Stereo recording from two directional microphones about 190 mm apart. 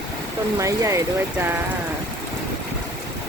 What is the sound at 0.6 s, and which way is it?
Speech, 15° right (ahead or behind).